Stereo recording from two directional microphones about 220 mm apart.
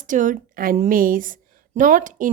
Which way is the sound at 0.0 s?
35° right (ahead or behind).